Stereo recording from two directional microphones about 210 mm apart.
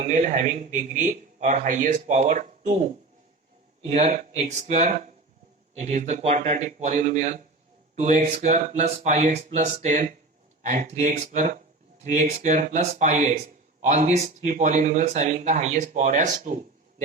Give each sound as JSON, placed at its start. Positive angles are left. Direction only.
{"t": 0.0, "sound": "a man's voice", "side_deg": -35}